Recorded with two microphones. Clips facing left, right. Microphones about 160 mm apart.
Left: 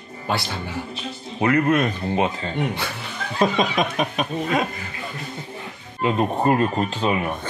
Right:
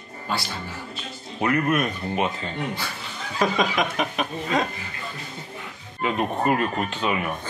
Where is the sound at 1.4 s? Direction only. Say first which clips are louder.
Left 4 dB; 25° left (ahead or behind).